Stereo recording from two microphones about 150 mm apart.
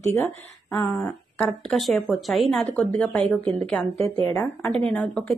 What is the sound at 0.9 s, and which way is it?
Speech, centre (ahead or behind).